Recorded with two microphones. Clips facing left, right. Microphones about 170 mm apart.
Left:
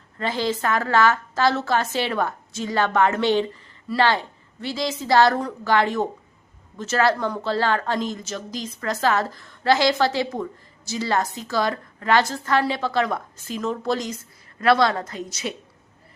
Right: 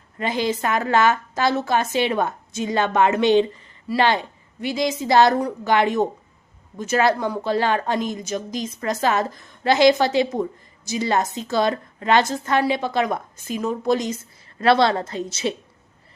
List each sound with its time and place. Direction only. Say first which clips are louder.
0.2 s a woman's voice: right 1 dB; 15° right (ahead or behind)